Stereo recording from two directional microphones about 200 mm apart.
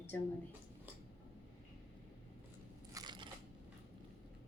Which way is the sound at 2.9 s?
20° right (ahead or behind).